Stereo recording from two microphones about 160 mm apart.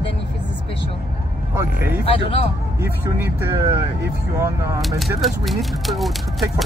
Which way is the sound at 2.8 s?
15° right (ahead or behind).